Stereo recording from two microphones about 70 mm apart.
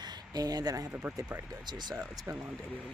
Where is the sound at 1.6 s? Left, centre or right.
Right.